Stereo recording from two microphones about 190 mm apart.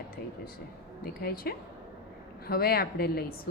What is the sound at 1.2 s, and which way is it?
Speech, 50° left (ahead or behind).